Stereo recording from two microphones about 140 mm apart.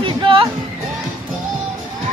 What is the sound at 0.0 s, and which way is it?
Music, 40° right (ahead or behind).